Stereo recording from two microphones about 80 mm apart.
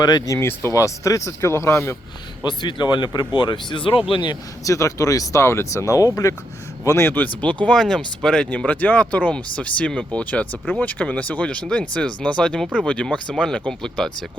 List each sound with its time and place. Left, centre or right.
0.0 s speech: left
0.3 s speech: left
0.7 s speech: left
2.4 s speech: left
4.6 s speech: left
5.4 s speech: left
6.8 s speech: left
7.8 s speech: centre